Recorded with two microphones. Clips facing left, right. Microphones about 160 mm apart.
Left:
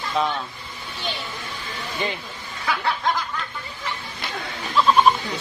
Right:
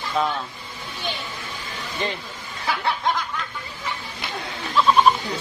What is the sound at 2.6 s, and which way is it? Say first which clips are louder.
Snicker: even; 20° right (ahead or behind).